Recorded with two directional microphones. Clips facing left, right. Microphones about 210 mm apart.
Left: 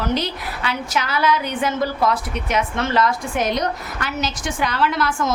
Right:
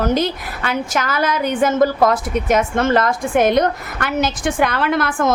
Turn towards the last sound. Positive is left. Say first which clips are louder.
# right 3 dB
turn(degrees=-55)  # may be behind; listen again after turning